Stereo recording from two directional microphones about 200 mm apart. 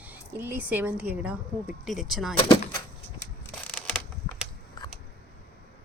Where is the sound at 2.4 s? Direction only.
25° left (ahead or behind).